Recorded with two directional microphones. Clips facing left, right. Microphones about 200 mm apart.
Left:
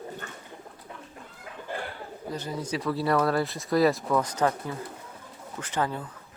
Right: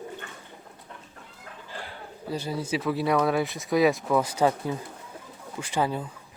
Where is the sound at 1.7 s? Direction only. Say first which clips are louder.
Left 6 dB; 55° left (ahead or behind).